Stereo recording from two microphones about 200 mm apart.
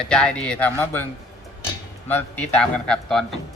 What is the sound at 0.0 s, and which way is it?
A man's voice, 5° left (ahead or behind).